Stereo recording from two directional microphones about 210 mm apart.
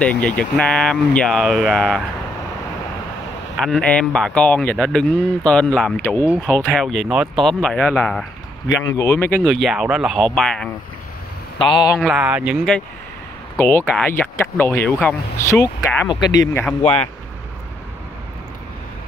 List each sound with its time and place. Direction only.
0.0 s speech: 5° left (ahead or behind)
3.5 s speech: centre (ahead or behind)
8.8 s speech: 15° left (ahead or behind)
11.5 s a man's voice: 25° left (ahead or behind)
12.0 s speech: 5° right (ahead or behind)
16.8 s a man's voice: 30° left (ahead or behind)